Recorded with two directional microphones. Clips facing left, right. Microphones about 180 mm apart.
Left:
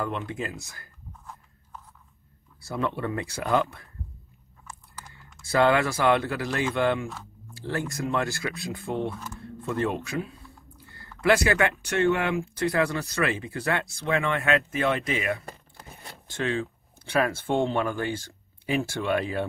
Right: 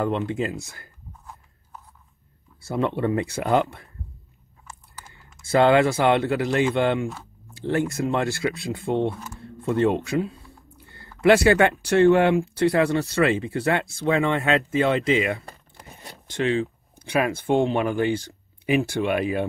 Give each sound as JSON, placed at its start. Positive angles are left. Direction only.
{"t": 0.0, "sound": "speech", "side_deg": -25}
{"t": 2.6, "sound": "speech", "side_deg": -20}
{"t": 5.4, "sound": "speech", "side_deg": -25}